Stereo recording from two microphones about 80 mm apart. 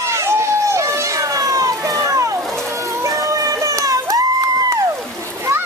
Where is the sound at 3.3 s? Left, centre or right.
Right.